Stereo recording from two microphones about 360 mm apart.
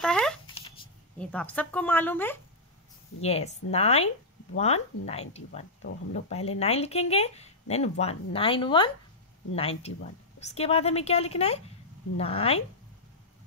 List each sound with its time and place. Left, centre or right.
0.0 s speech: centre
3.2 s speech: centre